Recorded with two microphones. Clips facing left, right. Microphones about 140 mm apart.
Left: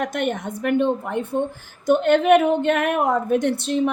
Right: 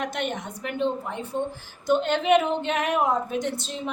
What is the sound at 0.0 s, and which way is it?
A woman's voice, 50° left (ahead or behind).